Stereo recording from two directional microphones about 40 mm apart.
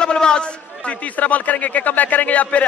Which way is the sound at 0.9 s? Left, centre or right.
Left.